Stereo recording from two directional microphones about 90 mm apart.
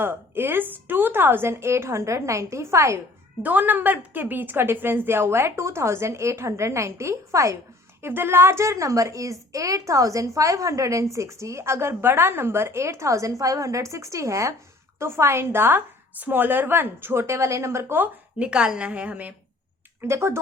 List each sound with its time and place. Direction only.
0.0 s a woman's voice: 25° right (ahead or behind)
3.4 s a woman's voice: 20° right (ahead or behind)
20.0 s a woman's voice: 30° right (ahead or behind)